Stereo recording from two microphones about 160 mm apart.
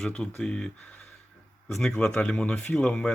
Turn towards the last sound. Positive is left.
turn(degrees=5)  # may be behind; listen again after turning